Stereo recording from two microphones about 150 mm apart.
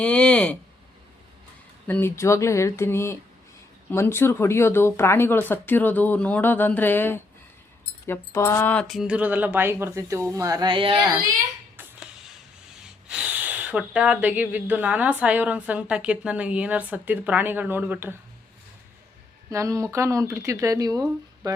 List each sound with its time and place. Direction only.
0.0 s speech: 10° left (ahead or behind)
1.9 s speech: 15° left (ahead or behind); by 11.0 s 35° right (ahead or behind)
11.8 s a sound: 5° right (ahead or behind)
12.8 s speech: 5° right (ahead or behind)
19.5 s speech: 20° right (ahead or behind)